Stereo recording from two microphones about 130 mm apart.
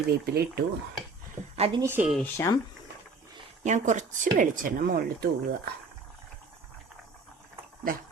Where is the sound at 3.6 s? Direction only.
70° right (ahead or behind); by 4.8 s 90° right.